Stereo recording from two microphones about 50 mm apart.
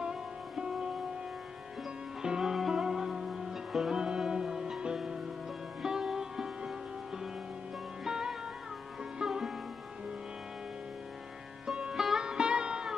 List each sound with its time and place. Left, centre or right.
0.0 s music: centre
2.2 s music: centre
8.0 s music: centre
11.6 s sitar: centre